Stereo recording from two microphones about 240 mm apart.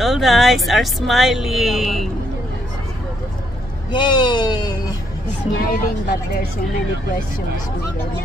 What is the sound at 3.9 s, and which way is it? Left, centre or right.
Speech, centre.